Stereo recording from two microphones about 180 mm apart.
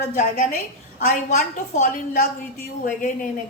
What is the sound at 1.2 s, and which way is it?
A woman's voice, 40° left (ahead or behind).